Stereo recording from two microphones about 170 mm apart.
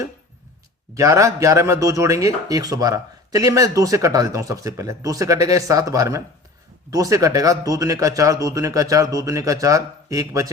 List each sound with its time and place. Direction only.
0.9 s speech: 20° right (ahead or behind)